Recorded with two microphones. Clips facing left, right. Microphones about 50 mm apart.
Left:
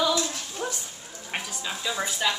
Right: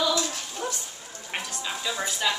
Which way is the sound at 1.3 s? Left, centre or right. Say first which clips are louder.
Even; centre.